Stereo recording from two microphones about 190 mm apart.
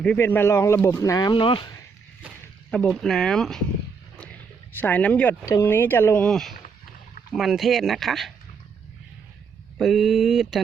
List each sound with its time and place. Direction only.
0.0 s speech: 10° left (ahead or behind); by 1.8 s 25° left (ahead or behind)
2.6 s speech: 5° left (ahead or behind)
4.8 s speech: 10° left (ahead or behind)
9.7 s speech: centre (ahead or behind)